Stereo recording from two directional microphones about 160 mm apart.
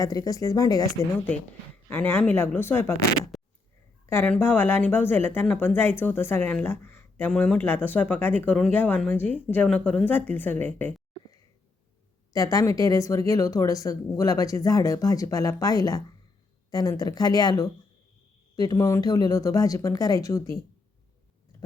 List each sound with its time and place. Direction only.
0.0 s speech: 20° left (ahead or behind)
4.0 s speech: 15° left (ahead or behind)
12.3 s speech: 20° left (ahead or behind)